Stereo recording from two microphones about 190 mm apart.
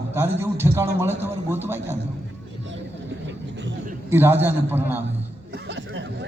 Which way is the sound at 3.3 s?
70° right (ahead or behind).